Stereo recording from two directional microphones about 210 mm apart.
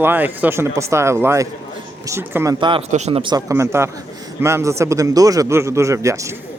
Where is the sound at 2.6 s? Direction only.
25° right (ahead or behind).